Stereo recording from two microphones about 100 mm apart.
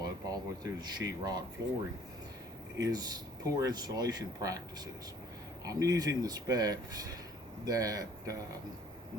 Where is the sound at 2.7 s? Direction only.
35° right (ahead or behind).